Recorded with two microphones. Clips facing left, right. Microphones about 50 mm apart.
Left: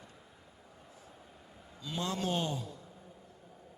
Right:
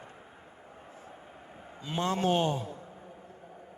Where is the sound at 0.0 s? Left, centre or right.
Right.